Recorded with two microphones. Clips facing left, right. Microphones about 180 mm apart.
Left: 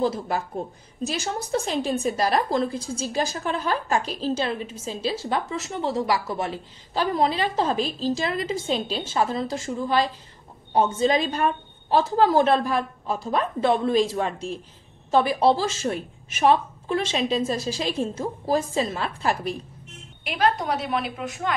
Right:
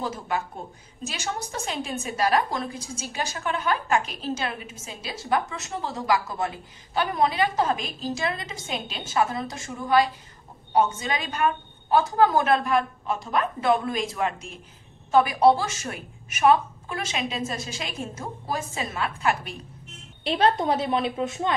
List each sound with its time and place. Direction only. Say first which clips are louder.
1.0 s a woman's voice: left 4 dB; 35° left (ahead or behind)
20.2 s a woman's voice: right 2 dB; 25° right (ahead or behind)